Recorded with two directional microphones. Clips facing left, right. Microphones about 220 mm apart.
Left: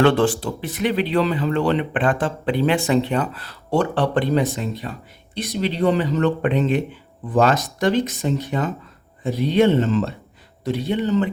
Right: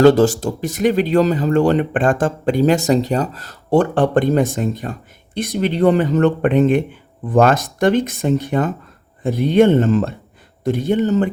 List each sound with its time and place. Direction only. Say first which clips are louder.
0.0 s speech: right 5 dB; 40° right (ahead or behind)